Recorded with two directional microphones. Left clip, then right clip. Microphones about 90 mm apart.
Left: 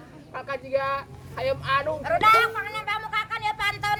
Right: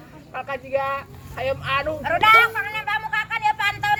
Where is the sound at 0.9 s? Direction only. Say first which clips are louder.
Right 1 dB; centre (ahead or behind).